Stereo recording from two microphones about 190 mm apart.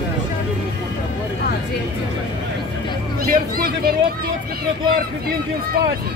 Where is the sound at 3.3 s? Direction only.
50° right (ahead or behind).